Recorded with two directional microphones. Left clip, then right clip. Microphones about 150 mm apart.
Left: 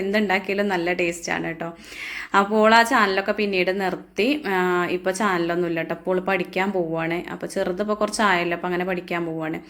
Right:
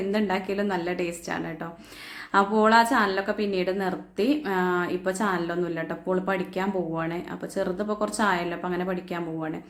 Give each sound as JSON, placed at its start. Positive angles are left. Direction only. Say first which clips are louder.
{"t": 0.1, "sound": "a woman's voice", "louder": "left 7 dB", "side_deg": 15}